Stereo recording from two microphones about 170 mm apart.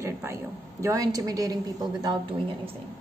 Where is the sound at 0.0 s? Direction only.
15° right (ahead or behind).